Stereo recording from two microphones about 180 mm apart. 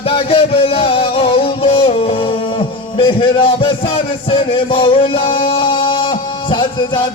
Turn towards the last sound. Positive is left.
turn(degrees=25)  # may be behind; listen again after turning